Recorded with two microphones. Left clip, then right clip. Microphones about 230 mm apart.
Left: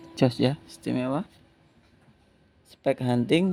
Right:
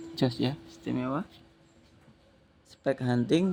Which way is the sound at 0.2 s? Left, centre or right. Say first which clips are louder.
Left 6 dB; left.